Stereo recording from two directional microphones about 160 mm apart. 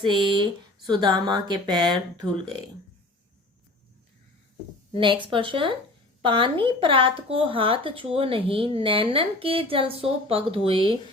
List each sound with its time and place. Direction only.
0.0 s a woman's voice: 30° right (ahead or behind)
4.9 s a woman's voice: 30° right (ahead or behind)